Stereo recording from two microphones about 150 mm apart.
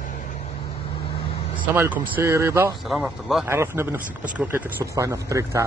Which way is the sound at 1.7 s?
10° right (ahead or behind).